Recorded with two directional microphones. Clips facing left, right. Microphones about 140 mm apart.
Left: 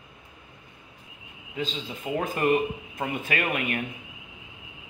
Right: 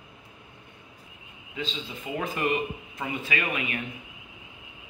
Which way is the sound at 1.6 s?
40° left (ahead or behind).